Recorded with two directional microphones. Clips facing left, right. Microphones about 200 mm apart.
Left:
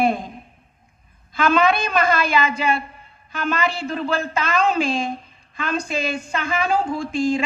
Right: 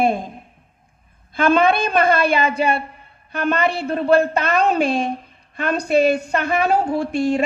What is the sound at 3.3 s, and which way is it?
A woman's voice, 60° right (ahead or behind).